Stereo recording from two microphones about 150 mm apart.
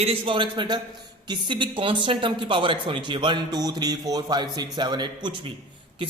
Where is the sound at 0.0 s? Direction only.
35° right (ahead or behind).